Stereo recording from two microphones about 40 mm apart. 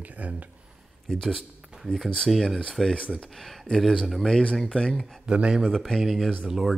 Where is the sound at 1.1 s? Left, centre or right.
Centre.